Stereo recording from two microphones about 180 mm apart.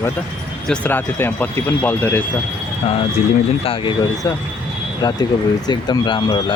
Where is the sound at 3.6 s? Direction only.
30° left (ahead or behind).